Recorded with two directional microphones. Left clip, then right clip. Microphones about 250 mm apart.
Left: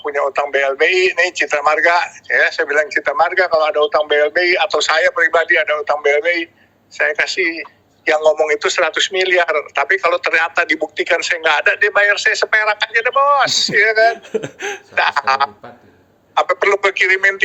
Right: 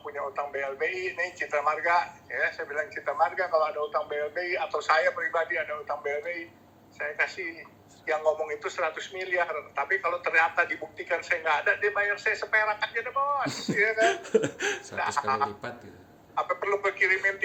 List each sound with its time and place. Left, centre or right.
0.0 s a man's voice: left
14.0 s speech: left
14.9 s speech: left